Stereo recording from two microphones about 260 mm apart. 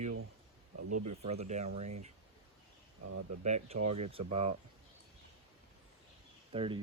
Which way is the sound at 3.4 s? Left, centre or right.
Right.